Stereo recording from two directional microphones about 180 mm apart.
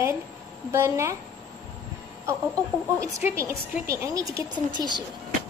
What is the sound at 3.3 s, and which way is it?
A woman's voice, 15° right (ahead or behind).